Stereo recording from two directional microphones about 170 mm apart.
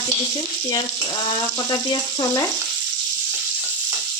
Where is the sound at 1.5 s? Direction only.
25° left (ahead or behind).